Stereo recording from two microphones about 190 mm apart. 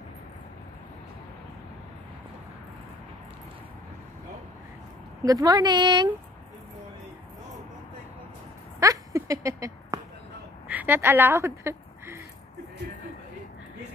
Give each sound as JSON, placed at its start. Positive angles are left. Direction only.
{"t": 5.2, "sound": "a woman's voice", "side_deg": -20}
{"t": 8.7, "sound": "a sound", "side_deg": -15}
{"t": 10.7, "sound": "a woman's voice", "side_deg": -10}